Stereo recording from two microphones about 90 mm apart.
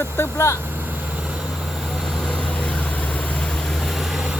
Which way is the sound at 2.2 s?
10° left (ahead or behind).